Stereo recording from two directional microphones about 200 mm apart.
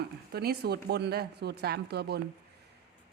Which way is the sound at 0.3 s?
55° right (ahead or behind).